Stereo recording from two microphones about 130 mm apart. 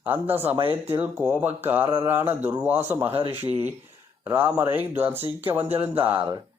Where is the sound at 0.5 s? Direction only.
45° right (ahead or behind).